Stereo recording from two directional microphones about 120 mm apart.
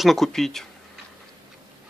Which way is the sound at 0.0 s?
Centre (ahead or behind).